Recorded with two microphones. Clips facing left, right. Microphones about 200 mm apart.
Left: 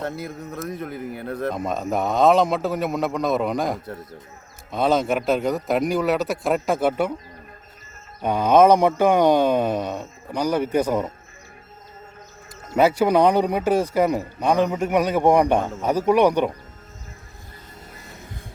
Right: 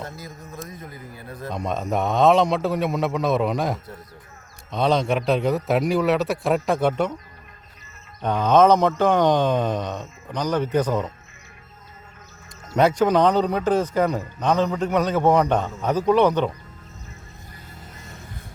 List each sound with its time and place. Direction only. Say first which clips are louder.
0.0 s speech: left 7 dB; 65° left (ahead or behind)
1.5 s a man's voice: even; centre (ahead or behind)
8.2 s speech: left 1 dB; 10° left (ahead or behind)
12.7 s speech: left 1 dB; 5° left (ahead or behind)